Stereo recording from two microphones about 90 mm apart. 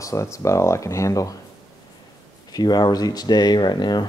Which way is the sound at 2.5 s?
50° left (ahead or behind).